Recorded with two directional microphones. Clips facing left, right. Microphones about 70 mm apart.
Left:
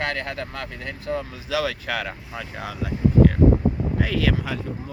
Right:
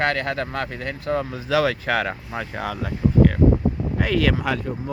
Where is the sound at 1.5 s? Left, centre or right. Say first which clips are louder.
Right 5 dB; right.